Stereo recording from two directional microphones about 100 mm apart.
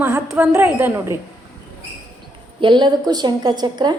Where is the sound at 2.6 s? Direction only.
50° right (ahead or behind).